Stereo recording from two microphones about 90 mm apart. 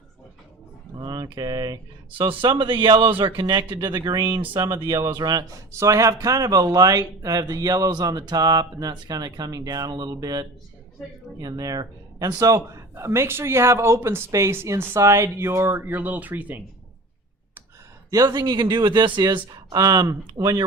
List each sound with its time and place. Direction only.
0.9 s speech: 50° right (ahead or behind)
3.8 s speech: 50° right (ahead or behind)
4.9 s speech: 35° right (ahead or behind)
5.1 s speech: 50° right (ahead or behind)
5.7 s speech: 35° right (ahead or behind)
12.9 s speech: 30° right (ahead or behind)
18.3 s speech: 50° right (ahead or behind)
19.5 s speech: 45° right (ahead or behind)